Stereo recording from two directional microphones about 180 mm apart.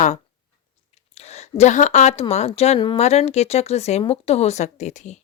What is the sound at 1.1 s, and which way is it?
A woman's voice, 35° left (ahead or behind).